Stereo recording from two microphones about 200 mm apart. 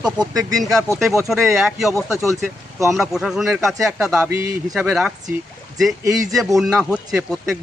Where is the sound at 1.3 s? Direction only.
Centre (ahead or behind).